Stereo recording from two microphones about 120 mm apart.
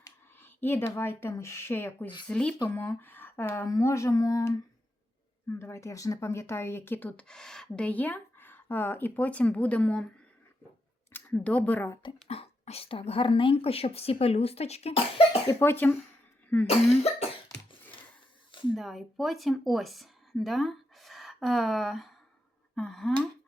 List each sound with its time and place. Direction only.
0.3 s speech: 15° left (ahead or behind)
11.1 s a woman's voice: 15° left (ahead or behind)
12.3 s speech: 55° left (ahead or behind)
15.4 s speech: 25° left (ahead or behind)
18.7 s speech: centre (ahead or behind)
22.7 s a sound: 5° left (ahead or behind)